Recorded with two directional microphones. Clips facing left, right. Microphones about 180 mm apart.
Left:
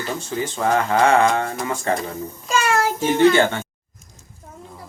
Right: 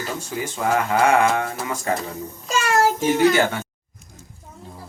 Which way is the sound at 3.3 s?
5° right (ahead or behind).